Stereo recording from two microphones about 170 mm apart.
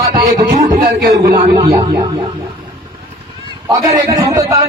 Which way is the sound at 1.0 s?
70° right (ahead or behind).